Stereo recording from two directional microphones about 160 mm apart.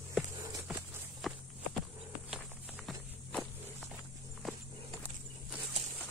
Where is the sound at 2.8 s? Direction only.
5° left (ahead or behind).